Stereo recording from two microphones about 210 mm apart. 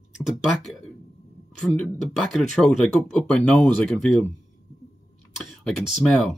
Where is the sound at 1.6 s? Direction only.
5° left (ahead or behind).